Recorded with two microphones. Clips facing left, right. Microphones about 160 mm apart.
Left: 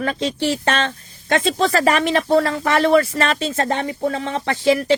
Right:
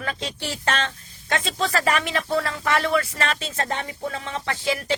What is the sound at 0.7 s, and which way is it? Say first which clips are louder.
Speech: left 5 dB; 55° left (ahead or behind).